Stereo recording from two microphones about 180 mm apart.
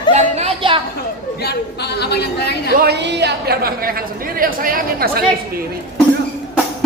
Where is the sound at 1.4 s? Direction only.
65° left (ahead or behind).